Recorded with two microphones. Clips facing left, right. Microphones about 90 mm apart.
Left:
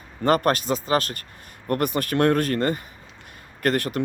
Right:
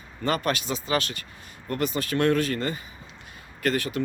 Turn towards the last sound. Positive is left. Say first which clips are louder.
# left 3 dB
turn(degrees=55)  # may be behind; listen again after turning